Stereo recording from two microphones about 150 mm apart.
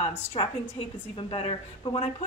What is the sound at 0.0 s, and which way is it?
A woman's voice, 40° left (ahead or behind).